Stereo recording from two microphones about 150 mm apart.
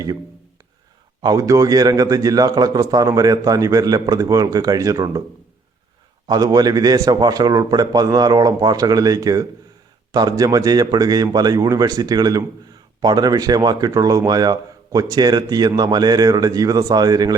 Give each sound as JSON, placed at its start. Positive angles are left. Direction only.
{"t": 1.2, "sound": "speech", "side_deg": -25}
{"t": 6.2, "sound": "speech", "side_deg": -25}